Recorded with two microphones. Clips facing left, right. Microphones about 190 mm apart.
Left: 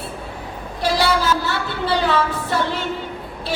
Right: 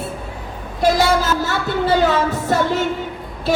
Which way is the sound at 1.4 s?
45° right (ahead or behind).